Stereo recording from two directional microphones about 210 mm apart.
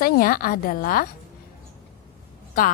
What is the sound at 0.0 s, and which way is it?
A woman's voice, 45° left (ahead or behind).